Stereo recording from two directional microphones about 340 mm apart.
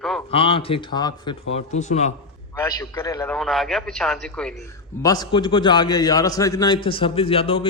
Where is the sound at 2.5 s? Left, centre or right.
Centre.